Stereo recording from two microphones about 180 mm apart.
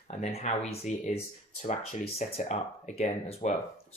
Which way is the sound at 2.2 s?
35° left (ahead or behind).